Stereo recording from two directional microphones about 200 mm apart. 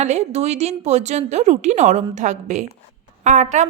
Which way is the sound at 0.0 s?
35° right (ahead or behind).